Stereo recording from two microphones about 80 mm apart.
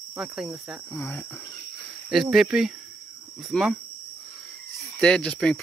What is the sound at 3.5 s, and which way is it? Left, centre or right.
Speech, centre.